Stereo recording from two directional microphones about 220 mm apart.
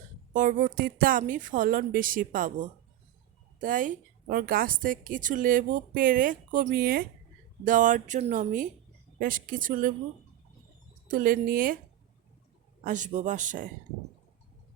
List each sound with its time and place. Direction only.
0.3 s a woman's voice: 35° right (ahead or behind)
3.6 s a woman's voice: 35° right (ahead or behind)
11.1 s a woman's voice: 40° right (ahead or behind)
12.8 s a woman's voice: 35° right (ahead or behind)